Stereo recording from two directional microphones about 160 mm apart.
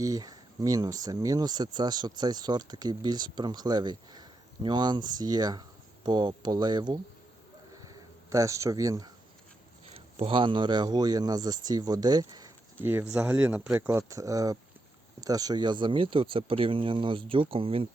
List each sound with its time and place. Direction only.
0.0 s speech: 20° right (ahead or behind)
8.3 s speech: 20° right (ahead or behind)
10.2 s speech: 35° right (ahead or behind)
12.8 s speech: 15° right (ahead or behind); by 17.8 s 35° right (ahead or behind)